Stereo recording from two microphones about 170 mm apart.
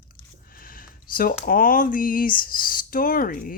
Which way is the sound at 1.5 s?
55° left (ahead or behind).